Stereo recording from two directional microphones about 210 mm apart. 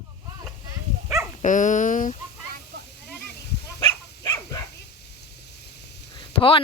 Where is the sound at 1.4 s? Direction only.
35° left (ahead or behind).